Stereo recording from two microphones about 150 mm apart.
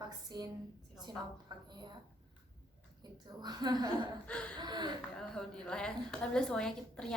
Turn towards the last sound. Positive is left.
turn(degrees=5)  # may be behind; listen again after turning